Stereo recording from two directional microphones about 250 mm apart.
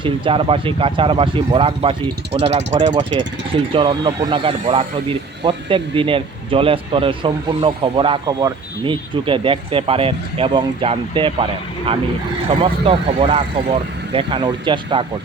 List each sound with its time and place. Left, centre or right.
0.0 s speech: right
12.5 s speech: right